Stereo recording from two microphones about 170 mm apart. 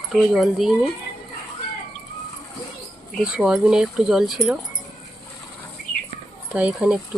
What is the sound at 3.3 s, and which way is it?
Speech, 5° right (ahead or behind).